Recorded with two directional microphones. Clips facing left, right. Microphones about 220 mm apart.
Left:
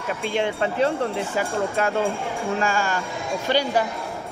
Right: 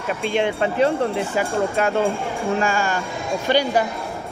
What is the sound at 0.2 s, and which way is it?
Speech, 20° right (ahead or behind).